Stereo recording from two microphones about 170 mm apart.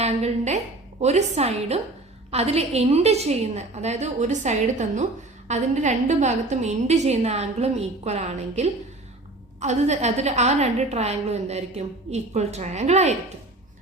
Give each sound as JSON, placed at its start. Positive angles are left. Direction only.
{"t": 0.0, "sound": "a woman's voice", "side_deg": -40}